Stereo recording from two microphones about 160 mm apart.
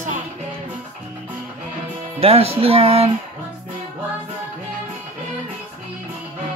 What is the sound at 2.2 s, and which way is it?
Music, 40° right (ahead or behind).